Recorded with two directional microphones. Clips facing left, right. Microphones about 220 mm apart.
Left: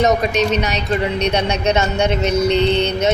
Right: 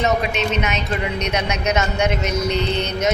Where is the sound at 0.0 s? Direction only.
40° left (ahead or behind).